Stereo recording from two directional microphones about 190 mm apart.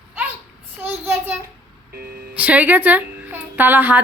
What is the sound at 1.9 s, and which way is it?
Music, 55° right (ahead or behind).